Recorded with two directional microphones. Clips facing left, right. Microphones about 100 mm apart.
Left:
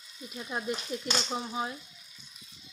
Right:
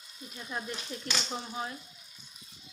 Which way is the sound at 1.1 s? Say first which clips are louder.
Left 3 dB; 25° left (ahead or behind).